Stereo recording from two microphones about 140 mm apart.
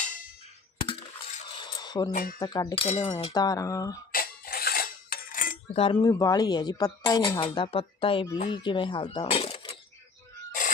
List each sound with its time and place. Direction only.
0.0 s clang: 70° left (ahead or behind)
1.5 s cutlery: 30° left (ahead or behind)
2.4 s speech: 25° left (ahead or behind)
2.7 s speech: 45° left (ahead or behind)
3.1 s speech: 30° left (ahead or behind)
4.1 s cutlery: 90° left
5.7 s speech: 40° left (ahead or behind)
6.1 s speech: 25° left (ahead or behind); by 9.6 s 45° left (ahead or behind)